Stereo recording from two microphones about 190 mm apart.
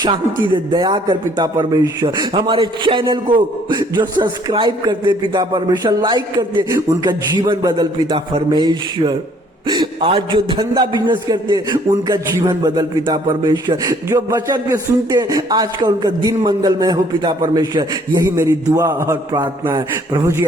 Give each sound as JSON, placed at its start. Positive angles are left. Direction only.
{"t": 0.4, "sound": "a man's voice", "side_deg": -25}